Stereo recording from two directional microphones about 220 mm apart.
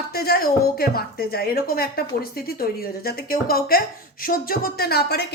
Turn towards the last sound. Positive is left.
turn(degrees=45)  # may be behind; listen again after turning